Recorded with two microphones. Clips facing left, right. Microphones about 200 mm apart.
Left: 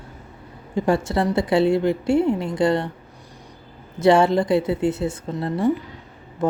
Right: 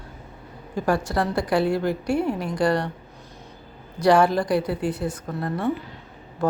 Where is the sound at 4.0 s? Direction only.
25° left (ahead or behind).